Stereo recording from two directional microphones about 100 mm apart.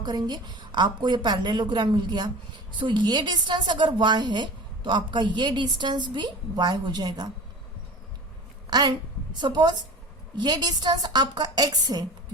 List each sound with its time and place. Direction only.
0.0 s a woman's voice: 45° right (ahead or behind)
8.7 s a woman's voice: 45° right (ahead or behind)